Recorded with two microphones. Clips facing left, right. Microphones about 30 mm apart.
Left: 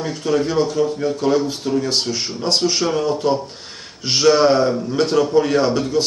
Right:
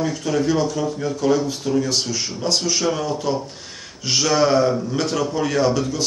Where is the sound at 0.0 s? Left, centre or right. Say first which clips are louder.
Left 1 dB; left.